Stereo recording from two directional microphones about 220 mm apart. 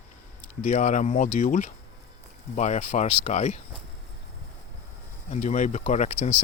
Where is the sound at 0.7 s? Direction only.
35° left (ahead or behind).